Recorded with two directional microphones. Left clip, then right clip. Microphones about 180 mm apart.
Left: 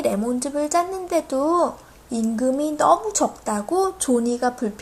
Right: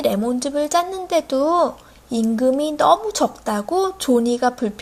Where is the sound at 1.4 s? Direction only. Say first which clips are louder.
Right 2 dB; 20° right (ahead or behind).